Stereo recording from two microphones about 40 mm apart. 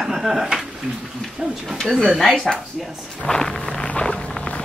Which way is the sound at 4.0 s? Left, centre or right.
Centre.